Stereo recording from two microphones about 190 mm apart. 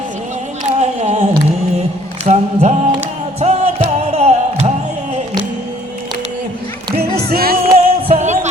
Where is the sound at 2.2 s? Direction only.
35° right (ahead or behind).